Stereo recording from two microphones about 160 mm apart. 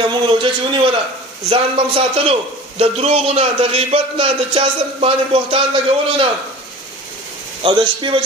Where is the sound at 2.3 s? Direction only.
40° right (ahead or behind).